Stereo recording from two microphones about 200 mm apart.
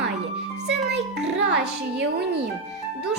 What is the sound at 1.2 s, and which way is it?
Music, 55° right (ahead or behind).